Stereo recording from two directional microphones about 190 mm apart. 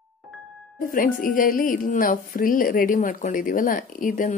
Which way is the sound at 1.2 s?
45° left (ahead or behind).